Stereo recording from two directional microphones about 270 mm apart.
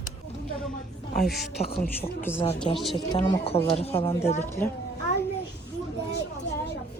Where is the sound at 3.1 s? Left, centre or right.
Centre.